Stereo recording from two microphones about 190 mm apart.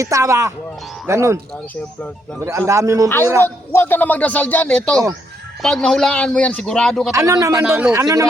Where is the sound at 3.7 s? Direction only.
10° left (ahead or behind).